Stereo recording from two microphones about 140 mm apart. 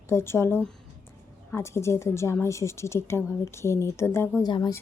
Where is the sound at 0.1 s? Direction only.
20° left (ahead or behind).